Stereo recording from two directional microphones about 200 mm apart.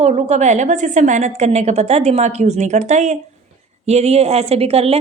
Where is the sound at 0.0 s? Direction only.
35° right (ahead or behind).